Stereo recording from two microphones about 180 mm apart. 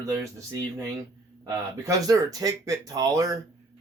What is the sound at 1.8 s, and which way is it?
A man's voice, 20° right (ahead or behind).